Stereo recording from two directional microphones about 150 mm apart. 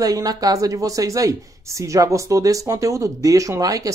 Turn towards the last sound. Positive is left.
turn(degrees=-25)  # may be behind; listen again after turning